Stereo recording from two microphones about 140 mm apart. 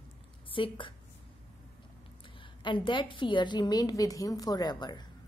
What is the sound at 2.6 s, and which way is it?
Speech, 35° left (ahead or behind).